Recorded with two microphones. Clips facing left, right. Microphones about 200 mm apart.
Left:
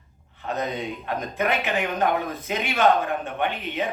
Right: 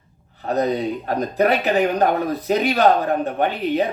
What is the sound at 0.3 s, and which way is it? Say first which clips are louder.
Speech: right 8 dB; 35° right (ahead or behind).